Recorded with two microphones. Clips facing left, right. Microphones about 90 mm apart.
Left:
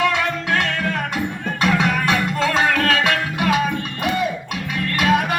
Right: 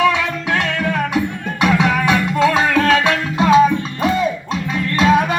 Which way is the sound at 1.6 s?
15° right (ahead or behind).